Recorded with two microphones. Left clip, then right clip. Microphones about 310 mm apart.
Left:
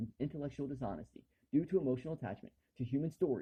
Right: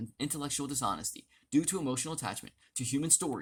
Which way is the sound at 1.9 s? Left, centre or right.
Right.